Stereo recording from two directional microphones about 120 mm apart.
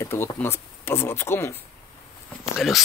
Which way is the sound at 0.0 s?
20° left (ahead or behind).